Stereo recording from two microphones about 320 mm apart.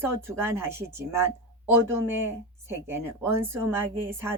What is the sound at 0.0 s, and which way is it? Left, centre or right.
Speech, centre.